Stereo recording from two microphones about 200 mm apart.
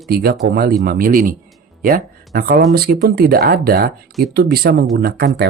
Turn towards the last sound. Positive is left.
turn(degrees=-55)  # may be behind; listen again after turning